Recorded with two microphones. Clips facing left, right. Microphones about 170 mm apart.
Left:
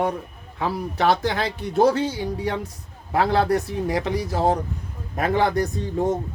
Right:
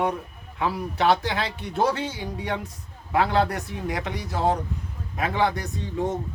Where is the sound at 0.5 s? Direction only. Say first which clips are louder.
Left 1 dB; 40° left (ahead or behind).